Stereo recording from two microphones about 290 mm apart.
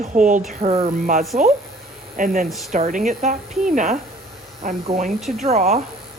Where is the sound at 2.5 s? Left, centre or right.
Centre.